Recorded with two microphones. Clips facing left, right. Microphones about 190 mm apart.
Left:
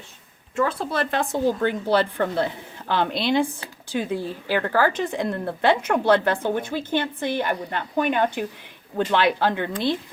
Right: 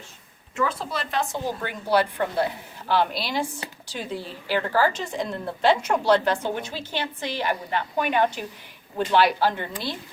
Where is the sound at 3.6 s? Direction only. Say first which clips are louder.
Right 2 dB; 20° right (ahead or behind).